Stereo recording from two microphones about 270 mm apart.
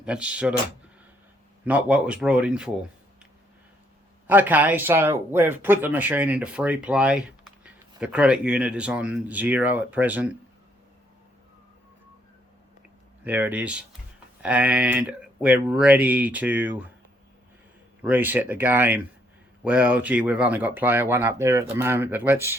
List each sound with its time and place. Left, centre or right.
0.0 s speech: centre
1.6 s speech: centre
4.3 s speech: centre
13.2 s speech: centre
18.0 s speech: centre